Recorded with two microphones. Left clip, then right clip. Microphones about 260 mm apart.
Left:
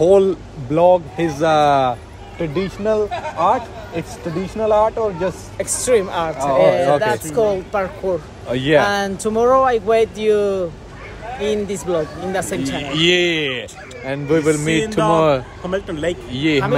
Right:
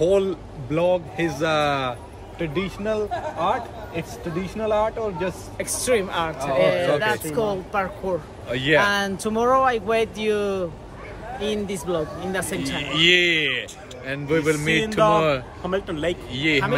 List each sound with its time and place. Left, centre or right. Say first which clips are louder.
0.0 s a man's voice: left 7 dB; centre
5.6 s speech: left 6 dB; centre
8.5 s speech: left 4 dB; centre
8.8 s speech: left 3 dB; centre
12.6 s a man's voice: even; centre
15.6 s speech: left 3 dB; centre
16.3 s a man's voice: left 3 dB; centre